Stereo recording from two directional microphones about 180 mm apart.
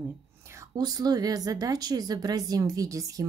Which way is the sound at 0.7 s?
20° right (ahead or behind).